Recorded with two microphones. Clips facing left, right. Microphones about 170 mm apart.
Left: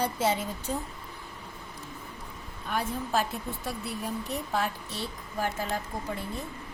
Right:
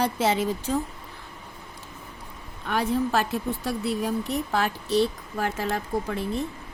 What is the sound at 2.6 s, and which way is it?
Speech, 75° right (ahead or behind).